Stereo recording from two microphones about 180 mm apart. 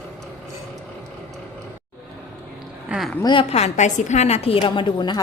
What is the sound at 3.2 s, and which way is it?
A woman's voice, 30° left (ahead or behind).